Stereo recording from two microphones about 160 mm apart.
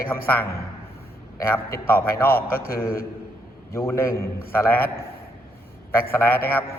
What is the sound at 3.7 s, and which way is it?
A man's voice, 15° left (ahead or behind).